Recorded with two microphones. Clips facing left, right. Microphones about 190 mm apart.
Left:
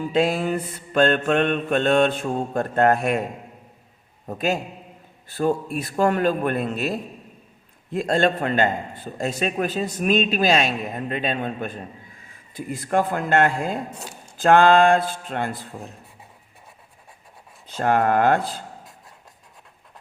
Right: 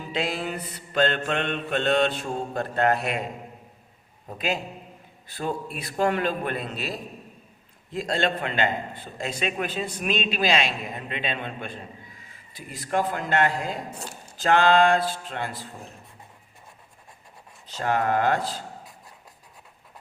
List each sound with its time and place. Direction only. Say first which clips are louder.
0.1 s a man's voice: left 7 dB; 50° left (ahead or behind)
4.4 s a man's voice: left 4 dB; 45° left (ahead or behind)
17.7 s speech: left 5 dB; 55° left (ahead or behind)